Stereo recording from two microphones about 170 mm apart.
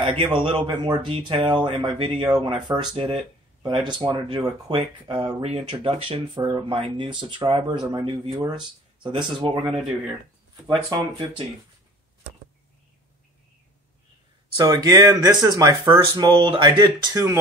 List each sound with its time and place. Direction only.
0.0 s speech: 30° right (ahead or behind)
10.9 s speech: 25° right (ahead or behind)
14.6 s speech: 20° right (ahead or behind)